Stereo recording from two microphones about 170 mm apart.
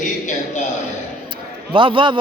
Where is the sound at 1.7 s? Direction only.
30° right (ahead or behind).